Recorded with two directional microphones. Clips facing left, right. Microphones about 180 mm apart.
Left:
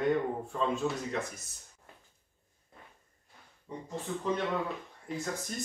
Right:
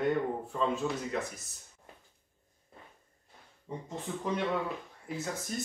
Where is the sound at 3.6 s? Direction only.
20° right (ahead or behind).